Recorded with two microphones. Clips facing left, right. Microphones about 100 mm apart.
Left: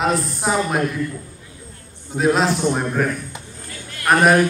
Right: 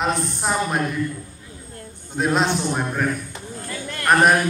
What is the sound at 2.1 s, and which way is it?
A man's voice, centre (ahead or behind).